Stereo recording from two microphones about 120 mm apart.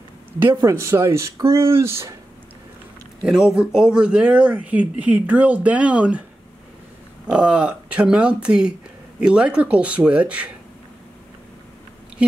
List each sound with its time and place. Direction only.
0.4 s speech: 20° right (ahead or behind)
3.3 s speech: 5° right (ahead or behind)
7.2 s speech: 10° right (ahead or behind)